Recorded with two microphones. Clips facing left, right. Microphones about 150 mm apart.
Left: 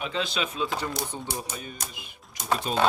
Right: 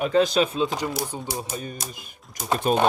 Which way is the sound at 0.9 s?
5° right (ahead or behind).